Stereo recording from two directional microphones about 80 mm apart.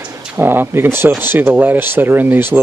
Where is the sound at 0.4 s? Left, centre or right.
Right.